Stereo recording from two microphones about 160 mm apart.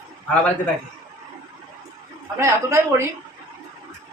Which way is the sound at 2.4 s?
15° right (ahead or behind).